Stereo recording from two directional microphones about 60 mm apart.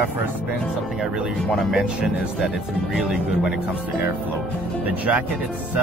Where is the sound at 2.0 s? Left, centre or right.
Centre.